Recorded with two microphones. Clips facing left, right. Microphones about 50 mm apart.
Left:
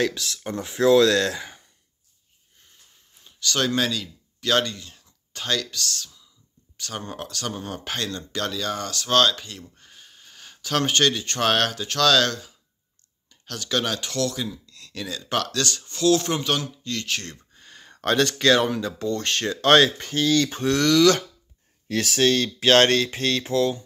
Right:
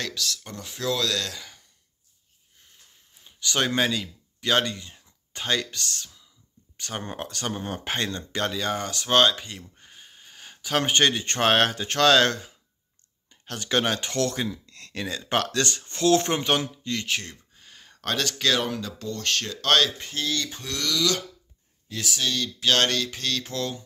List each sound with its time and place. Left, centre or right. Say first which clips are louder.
0.0 s speech: left 6 dB; left
3.3 s speech: left 1 dB; centre
17.6 s speech: left 4 dB; centre
20.0 s speech: left 8 dB; left
20.5 s speech: left 10 dB; left
21.8 s speech: left 8 dB; left
23.5 s speech: left 8 dB; centre